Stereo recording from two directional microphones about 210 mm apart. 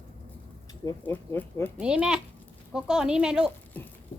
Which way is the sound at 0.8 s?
10° left (ahead or behind).